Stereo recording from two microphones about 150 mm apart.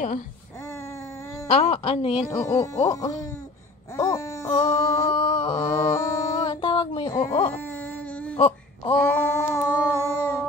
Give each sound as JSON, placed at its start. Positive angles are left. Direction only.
{"t": 1.5, "sound": "a woman's voice", "side_deg": 45}
{"t": 2.2, "sound": "wail", "side_deg": 20}
{"t": 5.1, "sound": "a sound", "side_deg": 35}
{"t": 5.7, "sound": "mantra", "side_deg": 20}
{"t": 7.5, "sound": "baby cry", "side_deg": 10}
{"t": 8.4, "sound": "wail", "side_deg": 35}
{"t": 8.9, "sound": "a sound", "side_deg": 15}